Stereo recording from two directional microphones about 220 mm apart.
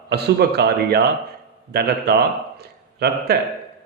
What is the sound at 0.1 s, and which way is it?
Speech, 45° right (ahead or behind).